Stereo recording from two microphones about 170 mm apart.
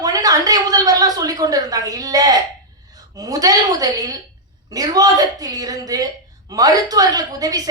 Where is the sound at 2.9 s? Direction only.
20° right (ahead or behind).